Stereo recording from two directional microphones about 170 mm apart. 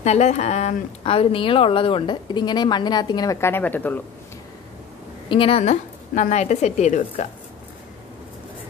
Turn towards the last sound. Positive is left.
turn(degrees=45)  # may be behind; listen again after turning